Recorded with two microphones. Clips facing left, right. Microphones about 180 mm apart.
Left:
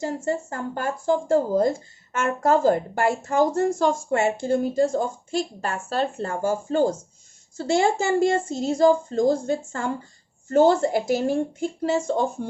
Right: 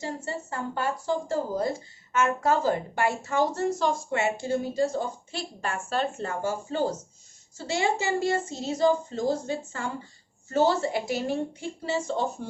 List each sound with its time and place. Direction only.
0.0 s a woman's voice: 45° left (ahead or behind)